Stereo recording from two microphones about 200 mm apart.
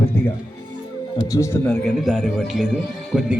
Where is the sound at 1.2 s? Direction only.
15° left (ahead or behind).